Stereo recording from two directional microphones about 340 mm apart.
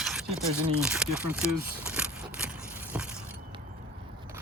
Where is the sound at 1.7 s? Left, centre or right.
Centre.